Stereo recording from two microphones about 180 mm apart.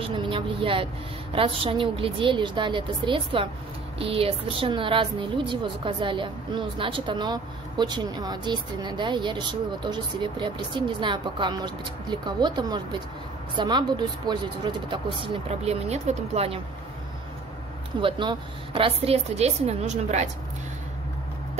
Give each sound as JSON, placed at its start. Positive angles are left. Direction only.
{"t": 0.0, "sound": "a woman's voice", "side_deg": -30}
{"t": 18.0, "sound": "a woman's voice", "side_deg": -25}